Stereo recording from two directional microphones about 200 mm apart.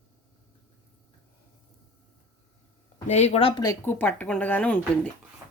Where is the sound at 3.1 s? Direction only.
35° left (ahead or behind).